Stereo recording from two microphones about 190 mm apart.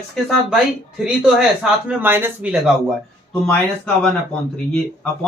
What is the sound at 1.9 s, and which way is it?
Speech, 10° right (ahead or behind).